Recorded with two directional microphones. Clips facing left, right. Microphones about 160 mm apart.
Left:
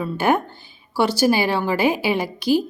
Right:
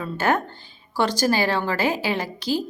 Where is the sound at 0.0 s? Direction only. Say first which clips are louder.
Left 3 dB; 10° left (ahead or behind).